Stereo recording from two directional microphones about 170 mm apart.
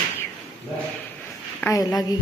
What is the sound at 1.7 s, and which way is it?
Speech, 20° left (ahead or behind).